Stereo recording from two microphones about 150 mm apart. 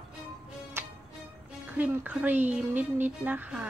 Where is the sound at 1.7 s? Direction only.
10° right (ahead or behind).